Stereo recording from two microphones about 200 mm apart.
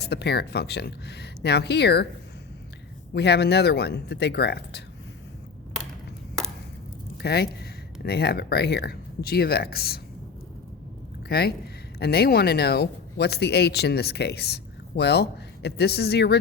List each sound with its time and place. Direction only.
0.0 s speech: 55° left (ahead or behind)
3.1 s speech: 55° left (ahead or behind)
7.2 s speech: 55° left (ahead or behind)
11.3 s speech: 50° left (ahead or behind)